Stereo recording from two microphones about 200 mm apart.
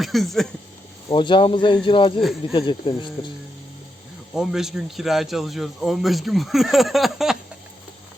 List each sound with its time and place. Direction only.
0.0 s speech: centre (ahead or behind)
1.1 s speech: 25° left (ahead or behind)
4.4 s a man's voice: centre (ahead or behind)